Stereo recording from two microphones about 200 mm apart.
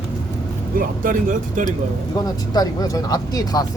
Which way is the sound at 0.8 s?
40° right (ahead or behind).